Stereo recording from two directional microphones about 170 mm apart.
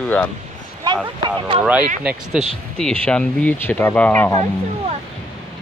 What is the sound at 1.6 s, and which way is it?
Speech, 10° right (ahead or behind).